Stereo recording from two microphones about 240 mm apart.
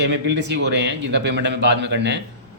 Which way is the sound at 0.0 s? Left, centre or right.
Right.